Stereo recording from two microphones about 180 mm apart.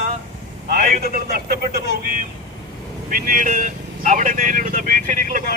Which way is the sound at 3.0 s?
50° right (ahead or behind).